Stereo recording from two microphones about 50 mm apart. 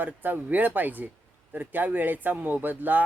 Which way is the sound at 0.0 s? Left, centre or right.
Right.